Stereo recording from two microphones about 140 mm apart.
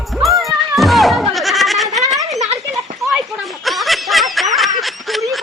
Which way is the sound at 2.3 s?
55° right (ahead or behind).